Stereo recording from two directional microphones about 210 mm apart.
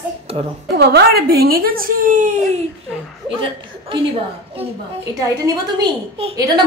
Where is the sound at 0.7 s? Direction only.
50° right (ahead or behind).